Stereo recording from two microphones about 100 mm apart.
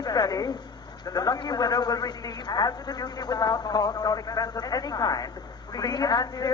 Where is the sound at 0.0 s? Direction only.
40° left (ahead or behind).